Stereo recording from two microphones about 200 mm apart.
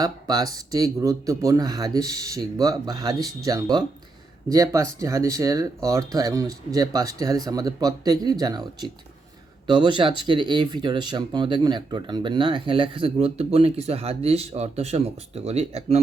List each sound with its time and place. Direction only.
0.0 s speech: 20° right (ahead or behind)